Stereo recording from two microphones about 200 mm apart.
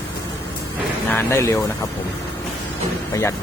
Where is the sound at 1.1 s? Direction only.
10° left (ahead or behind).